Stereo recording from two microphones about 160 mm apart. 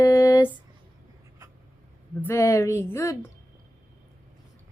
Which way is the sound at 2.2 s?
15° left (ahead or behind).